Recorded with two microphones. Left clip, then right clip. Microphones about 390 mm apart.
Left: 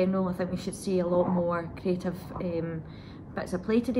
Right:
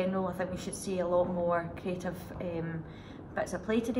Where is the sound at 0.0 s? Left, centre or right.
Centre.